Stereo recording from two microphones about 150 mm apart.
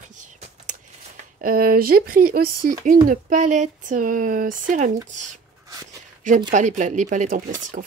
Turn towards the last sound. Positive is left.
turn(degrees=-55)  # may be behind; listen again after turning